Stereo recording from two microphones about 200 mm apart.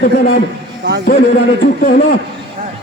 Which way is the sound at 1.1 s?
50° left (ahead or behind).